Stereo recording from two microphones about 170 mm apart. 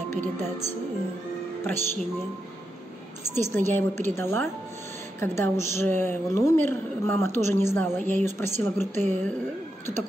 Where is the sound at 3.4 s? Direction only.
15° left (ahead or behind).